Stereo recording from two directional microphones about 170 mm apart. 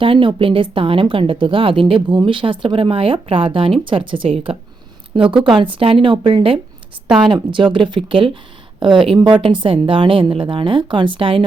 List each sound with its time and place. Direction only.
0.0 s a woman's voice: 30° right (ahead or behind)
5.5 s a woman's voice: 30° right (ahead or behind)